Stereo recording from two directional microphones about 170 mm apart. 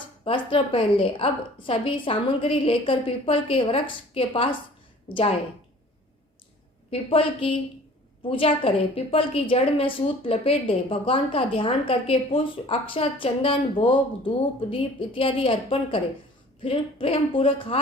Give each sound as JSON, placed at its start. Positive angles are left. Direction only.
{"t": 0.3, "sound": "a woman's voice", "side_deg": 30}
{"t": 6.9, "sound": "a woman's voice", "side_deg": 30}